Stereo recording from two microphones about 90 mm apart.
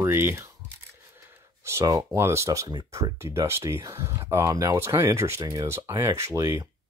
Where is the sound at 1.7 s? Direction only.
35° right (ahead or behind).